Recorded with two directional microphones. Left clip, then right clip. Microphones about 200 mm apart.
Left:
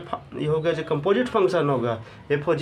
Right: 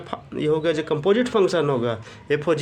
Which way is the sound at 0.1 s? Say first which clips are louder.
Right 3 dB; 40° right (ahead or behind).